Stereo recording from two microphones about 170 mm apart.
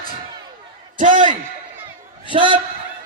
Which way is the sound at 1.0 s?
50° right (ahead or behind).